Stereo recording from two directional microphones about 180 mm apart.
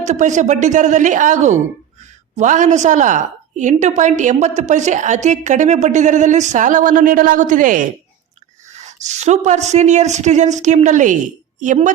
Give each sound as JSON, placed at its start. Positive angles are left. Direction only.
{"t": 0.0, "sound": "a woman's voice", "side_deg": -40}